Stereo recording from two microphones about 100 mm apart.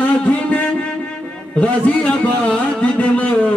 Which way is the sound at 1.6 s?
10° left (ahead or behind).